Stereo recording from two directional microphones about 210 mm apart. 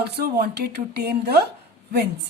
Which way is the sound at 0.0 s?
50° right (ahead or behind).